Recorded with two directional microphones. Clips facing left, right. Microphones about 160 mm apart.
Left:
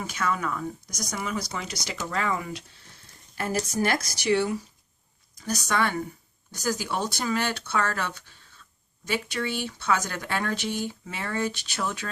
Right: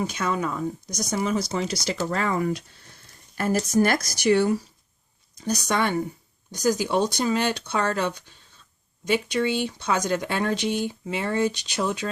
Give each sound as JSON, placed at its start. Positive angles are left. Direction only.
{"t": 0.0, "sound": "speech", "side_deg": -20}
{"t": 1.1, "sound": "speech", "side_deg": -35}
{"t": 5.4, "sound": "speech", "side_deg": -20}